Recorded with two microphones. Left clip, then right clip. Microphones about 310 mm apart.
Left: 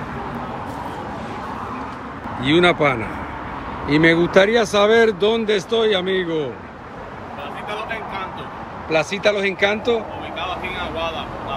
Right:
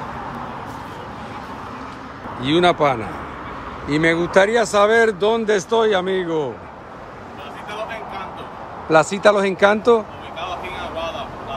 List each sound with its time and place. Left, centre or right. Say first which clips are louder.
2.4 s speech: even; centre
6.0 s speech: left 1 dB; right
8.9 s speech: right 4 dB; centre
10.8 s vehicle: left 2 dB; centre